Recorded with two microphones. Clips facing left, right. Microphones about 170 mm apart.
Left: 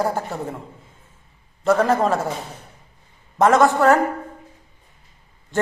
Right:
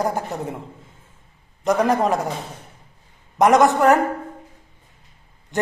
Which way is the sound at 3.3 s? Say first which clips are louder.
Right 1 dB; 15° right (ahead or behind).